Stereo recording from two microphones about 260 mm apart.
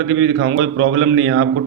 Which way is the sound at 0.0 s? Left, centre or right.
Right.